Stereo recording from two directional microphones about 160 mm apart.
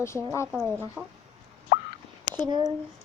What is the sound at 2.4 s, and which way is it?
Speech, 25° right (ahead or behind).